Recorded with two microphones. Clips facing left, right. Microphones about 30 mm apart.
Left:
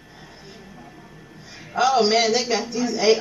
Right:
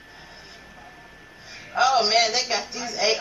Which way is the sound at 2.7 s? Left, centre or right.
Centre.